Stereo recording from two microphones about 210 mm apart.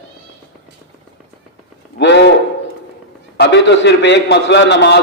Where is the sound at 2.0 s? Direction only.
55° left (ahead or behind).